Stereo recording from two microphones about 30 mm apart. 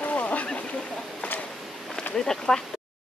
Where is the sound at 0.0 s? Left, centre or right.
Left.